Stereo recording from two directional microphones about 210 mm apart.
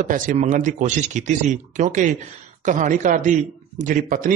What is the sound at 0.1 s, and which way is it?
A man's voice, 40° right (ahead or behind).